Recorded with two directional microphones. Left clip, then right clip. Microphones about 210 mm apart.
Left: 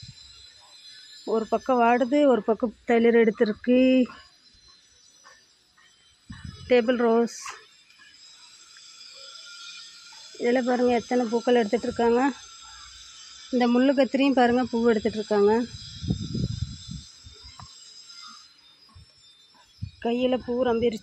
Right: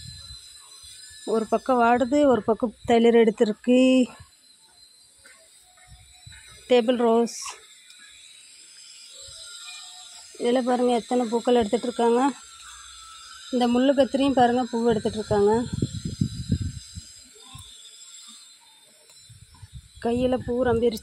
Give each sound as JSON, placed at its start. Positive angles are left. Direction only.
{"t": 1.2, "sound": "speech", "side_deg": -15}
{"t": 6.7, "sound": "speech", "side_deg": -10}
{"t": 10.3, "sound": "speech", "side_deg": -10}
{"t": 13.5, "sound": "speech", "side_deg": -5}
{"t": 14.6, "sound": "speech", "side_deg": 20}
{"t": 14.9, "sound": "speech", "side_deg": 0}
{"t": 20.0, "sound": "speech", "side_deg": -10}